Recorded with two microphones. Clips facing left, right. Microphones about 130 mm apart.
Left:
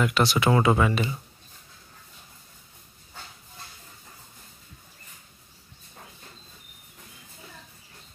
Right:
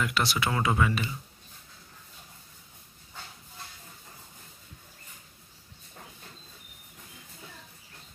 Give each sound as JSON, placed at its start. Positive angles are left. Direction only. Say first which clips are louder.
{"t": 0.0, "sound": "speech", "louder": "left 6 dB", "side_deg": 25}